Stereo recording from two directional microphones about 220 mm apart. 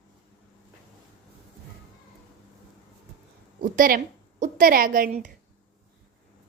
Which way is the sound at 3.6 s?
40° right (ahead or behind).